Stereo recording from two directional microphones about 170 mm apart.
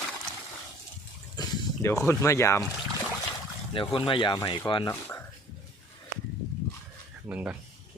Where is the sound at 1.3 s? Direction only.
20° left (ahead or behind).